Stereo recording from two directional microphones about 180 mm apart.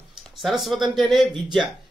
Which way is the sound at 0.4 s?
Centre (ahead or behind).